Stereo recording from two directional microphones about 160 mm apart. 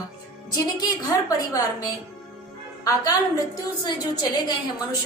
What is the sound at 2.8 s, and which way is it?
A woman's voice, 20° left (ahead or behind).